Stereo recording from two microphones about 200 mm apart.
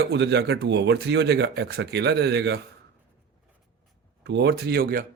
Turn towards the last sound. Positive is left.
turn(degrees=-50)  # may be behind; listen again after turning